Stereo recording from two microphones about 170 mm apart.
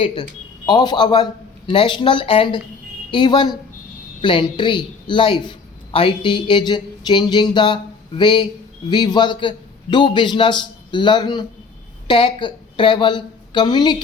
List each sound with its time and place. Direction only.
0.0 s a man's voice: 30° left (ahead or behind)